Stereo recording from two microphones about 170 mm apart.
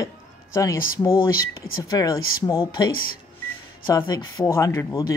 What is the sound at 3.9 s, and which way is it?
Speech, 20° left (ahead or behind).